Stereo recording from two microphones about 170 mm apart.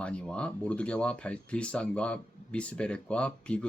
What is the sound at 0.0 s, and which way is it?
Speech, 5° left (ahead or behind).